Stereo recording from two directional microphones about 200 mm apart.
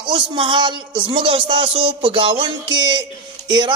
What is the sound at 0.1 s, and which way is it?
Music, 25° right (ahead or behind).